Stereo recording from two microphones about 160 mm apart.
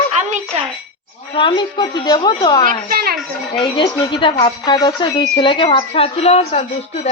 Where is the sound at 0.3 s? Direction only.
50° right (ahead or behind).